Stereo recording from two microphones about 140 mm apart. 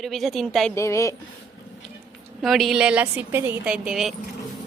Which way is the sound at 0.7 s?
20° left (ahead or behind).